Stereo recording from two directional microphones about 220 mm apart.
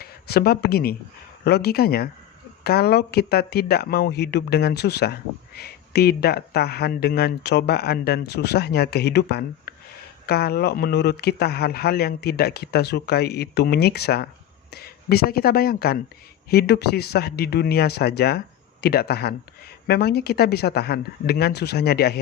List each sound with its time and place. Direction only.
0.0 s speech: 45° left (ahead or behind)